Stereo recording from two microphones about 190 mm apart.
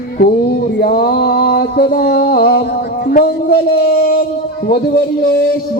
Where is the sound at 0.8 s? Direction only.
50° left (ahead or behind).